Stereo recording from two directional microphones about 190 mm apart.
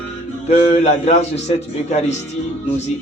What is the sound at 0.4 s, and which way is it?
A man's voice, 35° left (ahead or behind).